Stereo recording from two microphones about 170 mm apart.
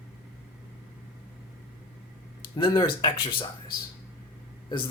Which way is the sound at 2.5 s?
30° left (ahead or behind).